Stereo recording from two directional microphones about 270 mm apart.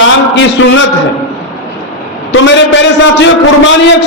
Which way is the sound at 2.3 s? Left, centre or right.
Left.